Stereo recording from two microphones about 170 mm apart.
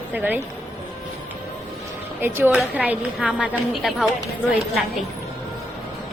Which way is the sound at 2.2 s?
10° right (ahead or behind).